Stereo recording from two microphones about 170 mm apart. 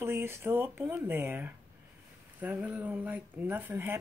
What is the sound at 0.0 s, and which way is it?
Speech, 15° right (ahead or behind).